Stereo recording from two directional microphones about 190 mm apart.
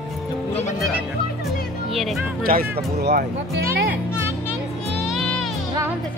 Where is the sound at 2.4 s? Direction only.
50° right (ahead or behind).